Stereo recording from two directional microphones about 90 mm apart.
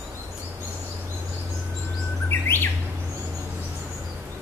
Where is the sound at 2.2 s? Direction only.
25° left (ahead or behind).